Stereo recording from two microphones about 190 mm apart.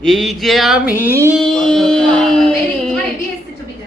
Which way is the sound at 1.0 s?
15° right (ahead or behind).